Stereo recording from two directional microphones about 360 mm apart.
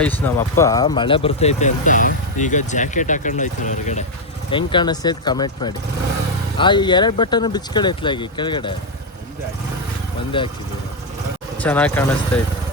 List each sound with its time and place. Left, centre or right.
0.0 s speech: centre
10.4 s speech: centre
11.5 s speech: centre